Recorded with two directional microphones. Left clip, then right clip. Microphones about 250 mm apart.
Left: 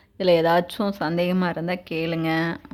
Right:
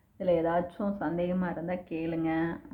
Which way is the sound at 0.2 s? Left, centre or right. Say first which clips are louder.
Left 9 dB; left.